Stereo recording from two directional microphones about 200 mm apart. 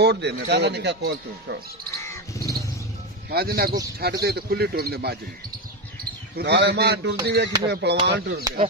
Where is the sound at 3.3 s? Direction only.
50° right (ahead or behind).